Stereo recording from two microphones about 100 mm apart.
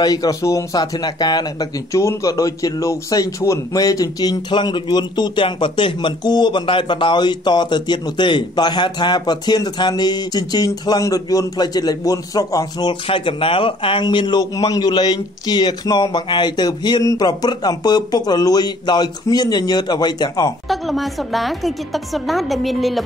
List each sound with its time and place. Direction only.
0.0 s speech: 40° left (ahead or behind)
0.9 s a man's voice: 45° left (ahead or behind); by 14.0 s 60° left (ahead or behind)
14.0 s a man's voice: 50° left (ahead or behind)
20.6 s a woman's voice: centre (ahead or behind)